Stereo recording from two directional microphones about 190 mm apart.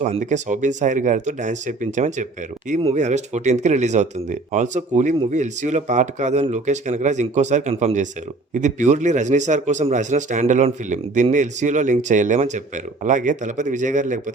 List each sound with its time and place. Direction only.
0.0 s a man's voice: 40° right (ahead or behind)